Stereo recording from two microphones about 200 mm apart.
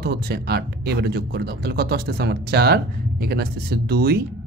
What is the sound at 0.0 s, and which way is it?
Speech, 50° right (ahead or behind).